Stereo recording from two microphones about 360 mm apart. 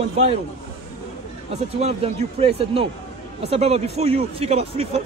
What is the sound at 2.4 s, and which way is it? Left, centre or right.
Speech, centre.